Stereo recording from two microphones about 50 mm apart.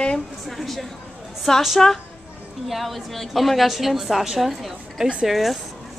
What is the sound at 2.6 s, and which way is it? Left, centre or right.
A woman's voice, centre.